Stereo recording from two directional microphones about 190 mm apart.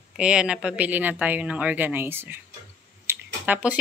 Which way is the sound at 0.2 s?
5° right (ahead or behind).